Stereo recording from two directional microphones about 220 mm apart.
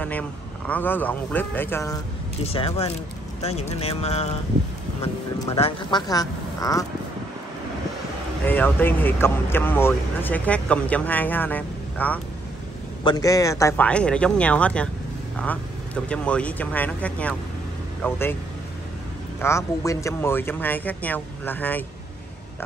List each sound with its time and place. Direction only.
0.7 s speech: 10° left (ahead or behind)
2.5 s speech: 25° left (ahead or behind)
8.5 s speech: 10° left (ahead or behind)
19.4 s speech: 15° left (ahead or behind)